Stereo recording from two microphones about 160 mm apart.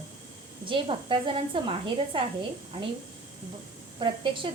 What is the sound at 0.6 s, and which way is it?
A woman's voice, 30° right (ahead or behind).